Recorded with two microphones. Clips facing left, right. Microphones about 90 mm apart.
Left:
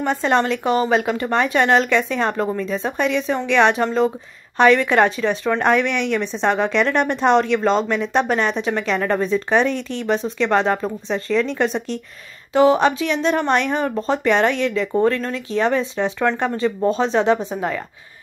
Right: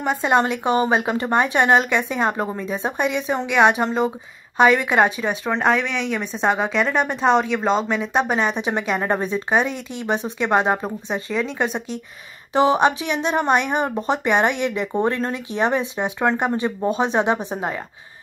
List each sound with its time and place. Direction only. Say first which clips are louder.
0.0 s a woman's voice: even; 10° right (ahead or behind)
12.5 s a woman's voice: left 2 dB; 20° right (ahead or behind)